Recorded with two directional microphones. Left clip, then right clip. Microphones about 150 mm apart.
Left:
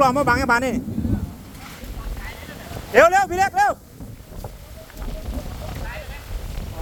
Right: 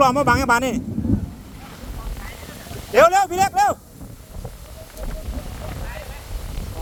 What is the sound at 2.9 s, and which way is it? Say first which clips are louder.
Speech: even; 20° right (ahead or behind).